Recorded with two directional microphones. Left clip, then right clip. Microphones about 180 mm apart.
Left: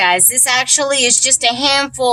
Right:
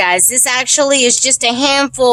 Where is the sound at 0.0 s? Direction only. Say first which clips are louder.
Right 1 dB; 65° right (ahead or behind).